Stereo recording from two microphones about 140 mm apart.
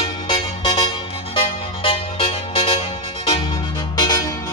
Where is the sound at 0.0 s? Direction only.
40° left (ahead or behind).